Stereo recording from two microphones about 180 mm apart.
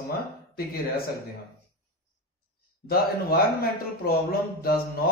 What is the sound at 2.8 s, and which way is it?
A man's voice, 55° left (ahead or behind).